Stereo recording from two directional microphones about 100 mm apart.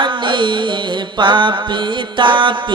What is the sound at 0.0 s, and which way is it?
Music, 55° right (ahead or behind).